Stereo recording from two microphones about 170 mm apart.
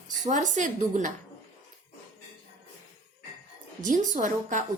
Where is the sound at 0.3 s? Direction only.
45° right (ahead or behind).